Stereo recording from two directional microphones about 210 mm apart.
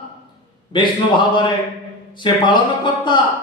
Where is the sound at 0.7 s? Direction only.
20° left (ahead or behind).